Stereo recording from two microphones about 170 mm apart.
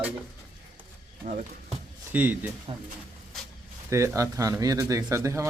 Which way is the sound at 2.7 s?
30° right (ahead or behind).